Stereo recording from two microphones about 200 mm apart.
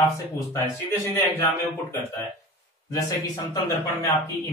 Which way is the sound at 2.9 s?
20° left (ahead or behind).